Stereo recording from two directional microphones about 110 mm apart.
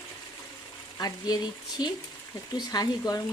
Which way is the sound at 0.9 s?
35° left (ahead or behind).